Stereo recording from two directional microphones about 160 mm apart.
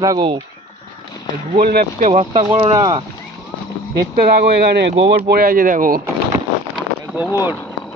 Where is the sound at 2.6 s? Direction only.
30° right (ahead or behind).